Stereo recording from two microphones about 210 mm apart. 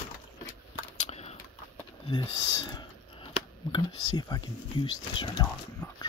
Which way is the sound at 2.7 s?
20° left (ahead or behind).